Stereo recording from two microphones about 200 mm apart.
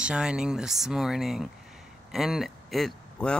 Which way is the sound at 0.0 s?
5° right (ahead or behind).